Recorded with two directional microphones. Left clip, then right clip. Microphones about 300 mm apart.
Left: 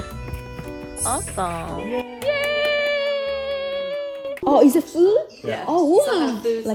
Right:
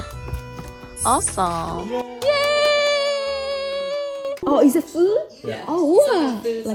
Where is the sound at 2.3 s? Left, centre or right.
Right.